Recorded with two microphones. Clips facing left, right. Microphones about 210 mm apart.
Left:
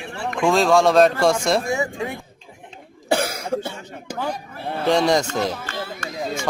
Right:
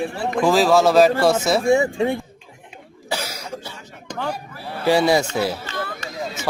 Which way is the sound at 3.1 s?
55° left (ahead or behind).